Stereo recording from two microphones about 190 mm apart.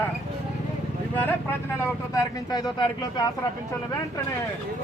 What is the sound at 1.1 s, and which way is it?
Speech, 10° left (ahead or behind).